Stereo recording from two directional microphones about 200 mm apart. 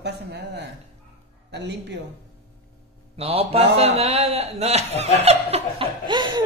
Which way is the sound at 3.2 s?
30° right (ahead or behind).